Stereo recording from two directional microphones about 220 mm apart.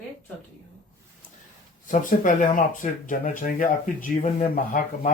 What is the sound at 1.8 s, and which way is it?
Speech, 35° left (ahead or behind).